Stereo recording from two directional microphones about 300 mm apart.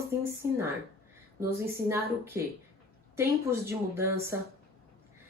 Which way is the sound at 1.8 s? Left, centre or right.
Centre.